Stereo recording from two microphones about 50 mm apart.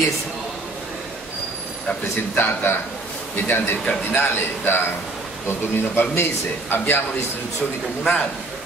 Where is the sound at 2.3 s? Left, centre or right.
Left.